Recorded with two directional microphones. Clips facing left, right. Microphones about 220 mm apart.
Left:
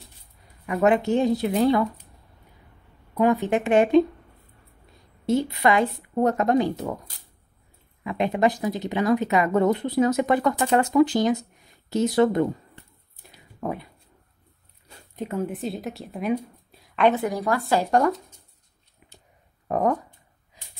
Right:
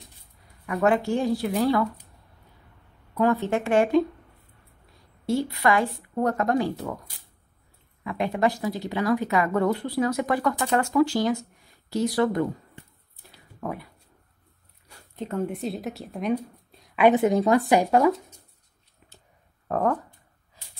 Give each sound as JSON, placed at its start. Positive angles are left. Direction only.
{"t": 0.7, "sound": "speech", "side_deg": 20}
{"t": 3.2, "sound": "speech", "side_deg": 15}
{"t": 5.2, "sound": "speech", "side_deg": 20}
{"t": 8.0, "sound": "speech", "side_deg": 20}
{"t": 13.3, "sound": "a sound", "side_deg": 20}
{"t": 14.9, "sound": "a sound", "side_deg": 20}
{"t": 15.2, "sound": "a woman's voice", "side_deg": 5}
{"t": 16.9, "sound": "a woman's voice", "side_deg": -10}
{"t": 17.2, "sound": "a woman's voice", "side_deg": -20}
{"t": 19.7, "sound": "speech", "side_deg": 10}
{"t": 20.6, "sound": "snort", "side_deg": 15}